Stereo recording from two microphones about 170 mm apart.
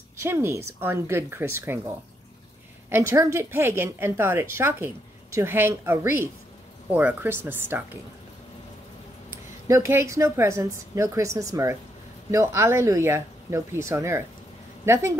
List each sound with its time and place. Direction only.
0.2 s a woman's voice: 15° right (ahead or behind)
9.3 s a woman's voice: 15° right (ahead or behind)